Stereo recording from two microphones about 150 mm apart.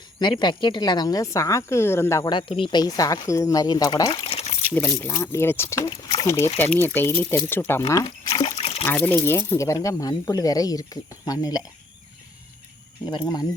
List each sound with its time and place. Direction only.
0.2 s speech: 30° left (ahead or behind)
2.3 s speech: 35° left (ahead or behind)
4.1 s speech: 35° left (ahead or behind)
4.7 s speech: 15° left (ahead or behind)
8.3 s trickle: 40° left (ahead or behind)
8.9 s speech: 15° left (ahead or behind)
13.1 s speech: 25° left (ahead or behind)